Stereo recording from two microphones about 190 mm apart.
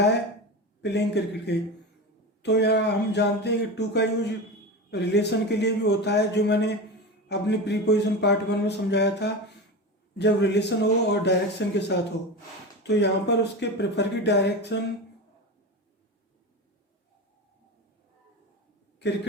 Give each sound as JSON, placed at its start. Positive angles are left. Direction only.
{"t": 0.8, "sound": "speech", "side_deg": 60}